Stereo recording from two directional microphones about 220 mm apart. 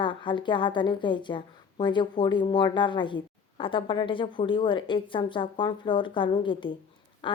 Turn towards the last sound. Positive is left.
turn(degrees=20)  # may be behind; listen again after turning